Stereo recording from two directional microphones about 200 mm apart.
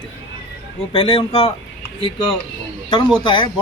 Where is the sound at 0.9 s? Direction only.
30° left (ahead or behind).